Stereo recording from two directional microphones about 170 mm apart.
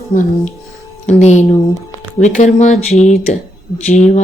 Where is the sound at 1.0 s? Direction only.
40° left (ahead or behind).